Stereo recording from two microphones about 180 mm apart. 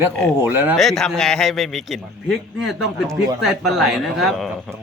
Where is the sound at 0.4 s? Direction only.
10° right (ahead or behind).